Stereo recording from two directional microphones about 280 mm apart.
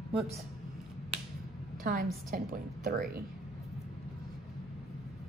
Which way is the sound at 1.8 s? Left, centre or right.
Right.